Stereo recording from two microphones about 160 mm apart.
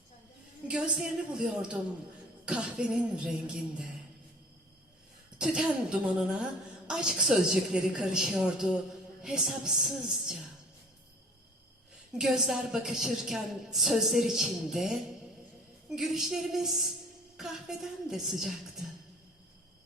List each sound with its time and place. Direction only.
0.7 s a woman's voice: 5° right (ahead or behind)
5.4 s a woman's voice: 5° right (ahead or behind)
12.1 s a woman's voice: 5° right (ahead or behind)